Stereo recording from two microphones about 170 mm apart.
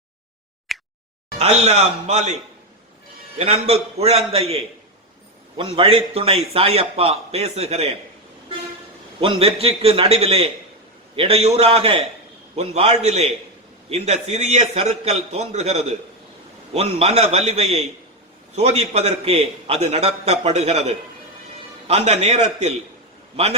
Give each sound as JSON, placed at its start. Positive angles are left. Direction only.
{"t": 0.7, "sound": "a sound", "side_deg": 0}
{"t": 1.4, "sound": "a man's voice", "side_deg": -40}
{"t": 3.3, "sound": "a man's voice", "side_deg": -40}
{"t": 9.2, "sound": "a man's voice", "side_deg": -35}